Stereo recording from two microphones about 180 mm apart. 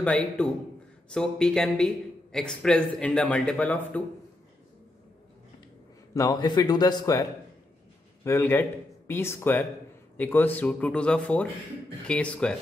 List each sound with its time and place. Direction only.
0.0 s a man's voice: 5° left (ahead or behind)
6.1 s a man's voice: 20° left (ahead or behind); by 12.5 s 5° left (ahead or behind)